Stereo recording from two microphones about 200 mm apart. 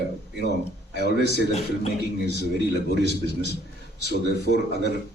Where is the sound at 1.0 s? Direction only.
60° right (ahead or behind).